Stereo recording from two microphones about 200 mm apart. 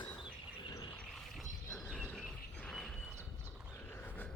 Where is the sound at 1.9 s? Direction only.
Centre (ahead or behind).